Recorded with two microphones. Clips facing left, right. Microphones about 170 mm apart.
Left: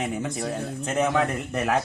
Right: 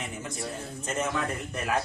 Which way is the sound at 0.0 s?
65° left (ahead or behind).